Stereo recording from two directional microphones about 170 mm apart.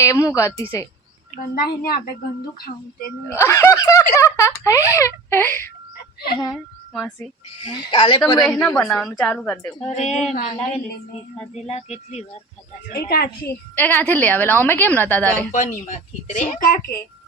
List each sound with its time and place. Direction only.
0.0 s speech: 15° left (ahead or behind)
1.5 s a woman's voice: 65° left (ahead or behind)
3.2 s speech: 15° left (ahead or behind)
6.3 s speech: 25° left (ahead or behind)
6.9 s a woman's voice: centre (ahead or behind)
7.6 s speech: 30° left (ahead or behind)
8.4 s a woman's voice: 10° left (ahead or behind)
9.8 s speech: 40° left (ahead or behind)
11.5 s speech: 40° left (ahead or behind)
12.9 s a woman's voice: 65° left (ahead or behind)
13.7 s speech: 10° left (ahead or behind)
15.5 s speech: 45° left (ahead or behind)